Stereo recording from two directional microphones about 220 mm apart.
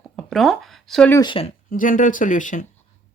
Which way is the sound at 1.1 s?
20° left (ahead or behind).